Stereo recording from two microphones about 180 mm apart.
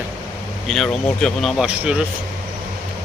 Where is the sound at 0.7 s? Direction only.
Centre (ahead or behind).